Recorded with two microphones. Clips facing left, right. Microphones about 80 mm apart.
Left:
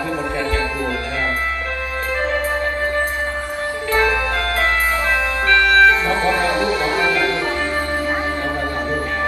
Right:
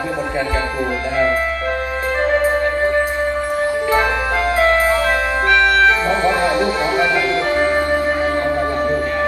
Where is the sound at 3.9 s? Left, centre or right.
Centre.